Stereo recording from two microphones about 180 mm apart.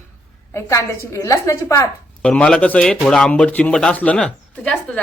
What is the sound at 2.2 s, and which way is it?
Speech, 5° left (ahead or behind).